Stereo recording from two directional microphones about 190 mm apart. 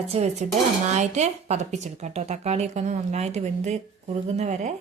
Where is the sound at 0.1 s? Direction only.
35° right (ahead or behind).